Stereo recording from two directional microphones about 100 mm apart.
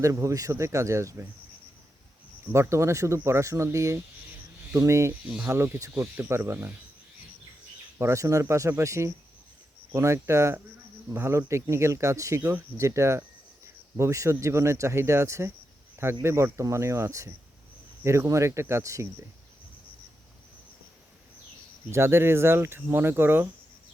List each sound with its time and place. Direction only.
0.0 s speech: 30° right (ahead or behind)
2.5 s speech: 30° right (ahead or behind)
5.2 s speech: 15° right (ahead or behind)
5.5 s speech: 25° right (ahead or behind)
7.9 s speech: 30° right (ahead or behind)
12.4 s speech: 20° right (ahead or behind)
12.7 s speech: 30° right (ahead or behind)
21.8 s speech: 25° right (ahead or behind)